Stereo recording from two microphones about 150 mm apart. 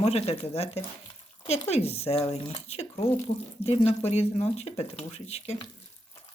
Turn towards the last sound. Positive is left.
turn(degrees=45)  # may be behind; listen again after turning